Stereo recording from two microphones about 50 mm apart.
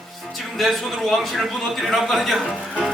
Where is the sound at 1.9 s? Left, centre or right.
Centre.